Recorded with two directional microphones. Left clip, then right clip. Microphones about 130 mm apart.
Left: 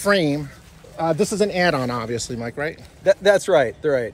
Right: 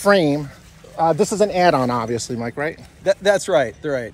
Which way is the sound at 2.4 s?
50° right (ahead or behind).